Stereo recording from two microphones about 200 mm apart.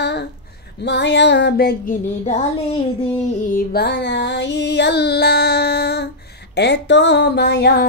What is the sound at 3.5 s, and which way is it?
Music, 55° left (ahead or behind).